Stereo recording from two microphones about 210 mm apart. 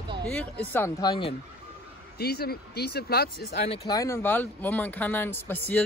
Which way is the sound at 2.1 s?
50° left (ahead or behind).